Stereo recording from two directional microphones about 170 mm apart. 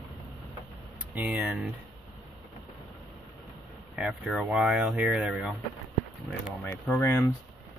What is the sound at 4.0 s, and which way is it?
Speech, centre (ahead or behind).